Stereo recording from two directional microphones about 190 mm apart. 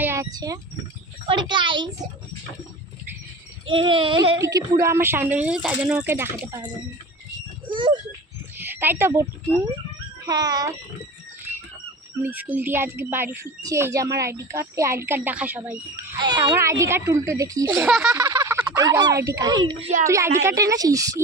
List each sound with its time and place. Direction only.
0.0 s a sound: 15° right (ahead or behind)
1.3 s speech: 25° right (ahead or behind)
3.7 s speech: 25° right (ahead or behind)
4.4 s speech: 15° right (ahead or behind)
7.7 s speech: 25° right (ahead or behind)
8.5 s speech: 10° right (ahead or behind)
12.2 s speech: 10° right (ahead or behind)
16.1 s speech: 25° right (ahead or behind)
17.8 s speech: centre (ahead or behind)
18.1 s a sound: 15° right (ahead or behind)
18.7 s speech: 20° right (ahead or behind)